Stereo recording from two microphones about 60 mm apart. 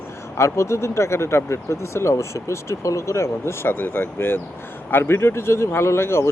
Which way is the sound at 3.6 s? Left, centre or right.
Left.